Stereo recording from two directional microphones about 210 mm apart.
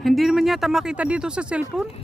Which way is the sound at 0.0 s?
Centre (ahead or behind).